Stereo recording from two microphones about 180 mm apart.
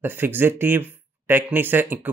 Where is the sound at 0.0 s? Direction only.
10° right (ahead or behind).